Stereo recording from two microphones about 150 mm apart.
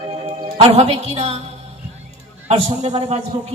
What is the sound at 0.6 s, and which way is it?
Speech, 45° right (ahead or behind).